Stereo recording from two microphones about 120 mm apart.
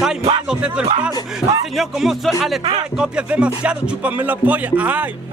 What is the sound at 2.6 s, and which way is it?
Speech, 40° right (ahead or behind).